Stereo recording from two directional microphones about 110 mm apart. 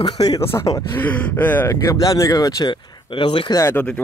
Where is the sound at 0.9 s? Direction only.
15° left (ahead or behind); by 3.5 s 50° left (ahead or behind).